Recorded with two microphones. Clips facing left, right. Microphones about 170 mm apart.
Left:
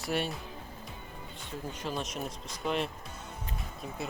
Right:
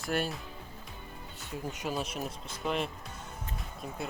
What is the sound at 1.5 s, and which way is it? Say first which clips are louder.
Speech: right 1 dB; 10° right (ahead or behind).